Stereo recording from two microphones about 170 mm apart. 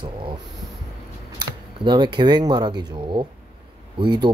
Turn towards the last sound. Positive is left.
turn(degrees=-25)  # may be behind; listen again after turning